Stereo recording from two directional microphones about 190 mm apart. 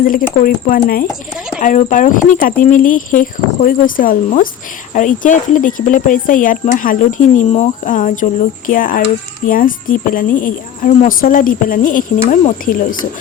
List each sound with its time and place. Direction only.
0.0 s speech: 50° left (ahead or behind)